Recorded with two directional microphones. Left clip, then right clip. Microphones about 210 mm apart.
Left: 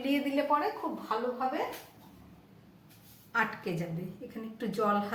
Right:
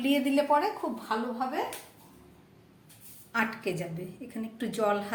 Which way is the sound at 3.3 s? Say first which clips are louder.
Right 1 dB; 40° right (ahead or behind).